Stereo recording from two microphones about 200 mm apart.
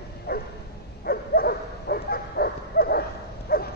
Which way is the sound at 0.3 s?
50° left (ahead or behind).